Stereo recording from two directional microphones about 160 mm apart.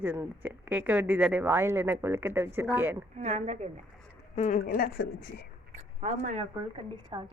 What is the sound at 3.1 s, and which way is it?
Speech, 45° right (ahead or behind).